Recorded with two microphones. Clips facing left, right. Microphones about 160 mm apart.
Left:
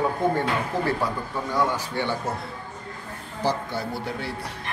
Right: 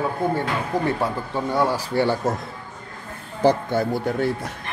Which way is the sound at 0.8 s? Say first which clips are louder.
Right 2 dB; 25° right (ahead or behind).